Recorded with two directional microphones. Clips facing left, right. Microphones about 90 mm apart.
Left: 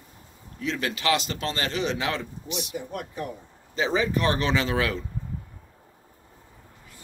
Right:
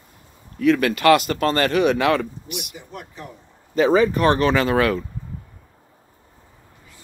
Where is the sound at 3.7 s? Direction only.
50° right (ahead or behind).